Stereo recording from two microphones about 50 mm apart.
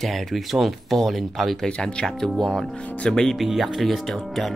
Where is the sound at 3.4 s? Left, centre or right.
Centre.